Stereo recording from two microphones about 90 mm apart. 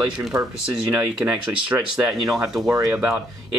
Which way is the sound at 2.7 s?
35° right (ahead or behind).